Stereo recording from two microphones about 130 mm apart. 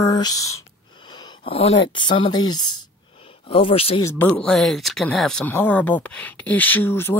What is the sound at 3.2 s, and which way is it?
Speech, 45° left (ahead or behind).